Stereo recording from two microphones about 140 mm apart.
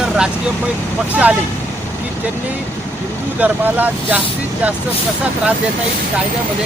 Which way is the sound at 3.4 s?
10° right (ahead or behind).